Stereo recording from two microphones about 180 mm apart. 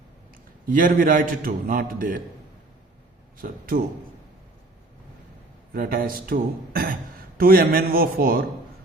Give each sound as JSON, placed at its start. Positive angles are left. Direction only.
{"t": 0.7, "sound": "a man's voice", "side_deg": -50}
{"t": 3.3, "sound": "a man's voice", "side_deg": -50}
{"t": 5.7, "sound": "a man's voice", "side_deg": -55}